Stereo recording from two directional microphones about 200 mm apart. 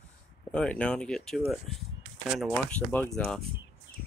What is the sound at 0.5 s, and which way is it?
Speech, 5° left (ahead or behind).